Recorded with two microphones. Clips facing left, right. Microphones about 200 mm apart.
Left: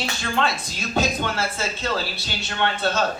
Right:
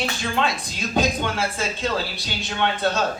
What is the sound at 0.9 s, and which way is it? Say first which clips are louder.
Speech: right 1 dB; 15° right (ahead or behind).